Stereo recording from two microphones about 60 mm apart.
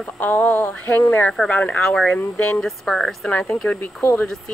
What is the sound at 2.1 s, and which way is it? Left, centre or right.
Speech, left.